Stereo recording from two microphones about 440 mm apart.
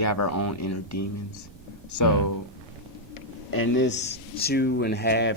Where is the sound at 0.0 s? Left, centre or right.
Left.